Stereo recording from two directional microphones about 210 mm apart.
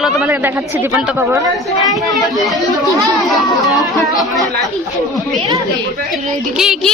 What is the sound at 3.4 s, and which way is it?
Speech, 15° left (ahead or behind).